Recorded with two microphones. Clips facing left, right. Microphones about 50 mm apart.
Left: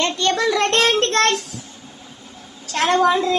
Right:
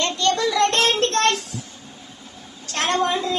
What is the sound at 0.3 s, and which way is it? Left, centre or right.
Child singing, left.